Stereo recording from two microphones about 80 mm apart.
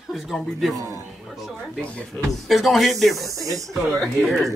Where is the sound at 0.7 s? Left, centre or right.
Right.